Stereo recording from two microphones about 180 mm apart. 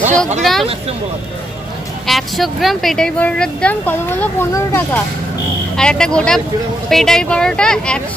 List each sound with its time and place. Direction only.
0.4 s speech: centre (ahead or behind)
2.0 s speech: centre (ahead or behind)